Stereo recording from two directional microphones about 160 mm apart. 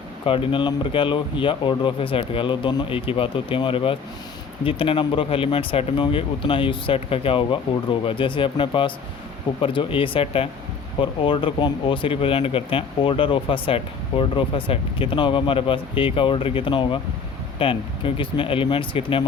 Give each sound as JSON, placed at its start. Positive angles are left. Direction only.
{"t": 0.3, "sound": "speech", "side_deg": 30}